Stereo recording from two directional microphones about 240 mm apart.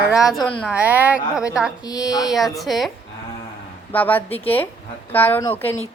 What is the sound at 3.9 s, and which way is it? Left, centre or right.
A woman's voice, centre.